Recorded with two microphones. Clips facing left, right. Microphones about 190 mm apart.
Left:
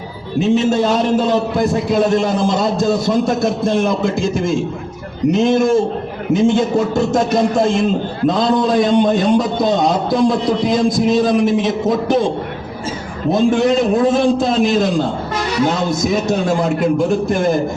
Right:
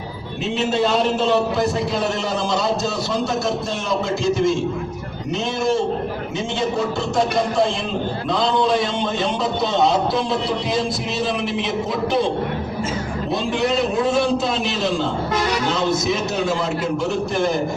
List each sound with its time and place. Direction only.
0.3 s a man's voice: 45° left (ahead or behind)
13.3 s a man's voice: 45° left (ahead or behind)
16.0 s a man's voice: 50° left (ahead or behind)